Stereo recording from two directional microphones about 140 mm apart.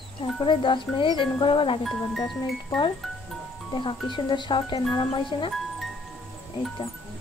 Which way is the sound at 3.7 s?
35° left (ahead or behind).